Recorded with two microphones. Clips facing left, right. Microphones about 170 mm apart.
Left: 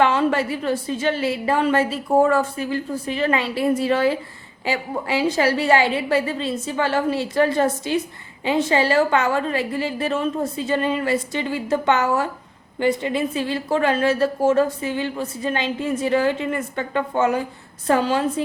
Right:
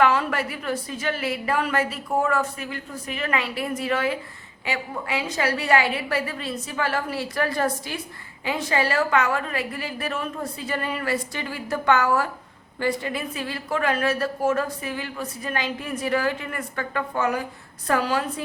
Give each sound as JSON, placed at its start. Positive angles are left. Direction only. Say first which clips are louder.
{"t": 0.0, "sound": "a woman's voice", "louder": "left 3 dB", "side_deg": 25}